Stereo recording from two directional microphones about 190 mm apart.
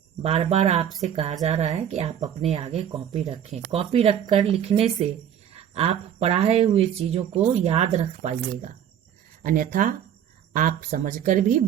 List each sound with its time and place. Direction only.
0.2 s speech: 30° right (ahead or behind)
9.4 s speech: 45° right (ahead or behind)